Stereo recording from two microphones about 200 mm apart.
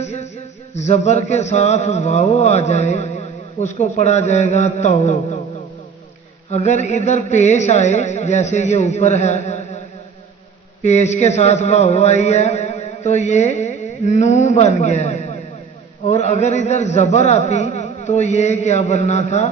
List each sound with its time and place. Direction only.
0.0 s a sound: 35° left (ahead or behind)
0.8 s speech: 35° left (ahead or behind)
6.5 s speech: 35° left (ahead or behind)
10.8 s a man's voice: 35° left (ahead or behind)